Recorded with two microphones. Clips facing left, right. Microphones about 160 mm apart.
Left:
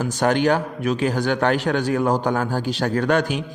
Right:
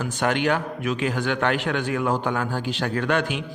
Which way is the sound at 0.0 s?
35° left (ahead or behind).